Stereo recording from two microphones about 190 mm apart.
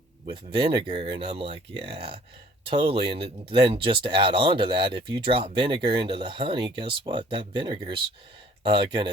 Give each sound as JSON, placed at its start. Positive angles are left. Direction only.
{"t": 0.3, "sound": "speech", "side_deg": -25}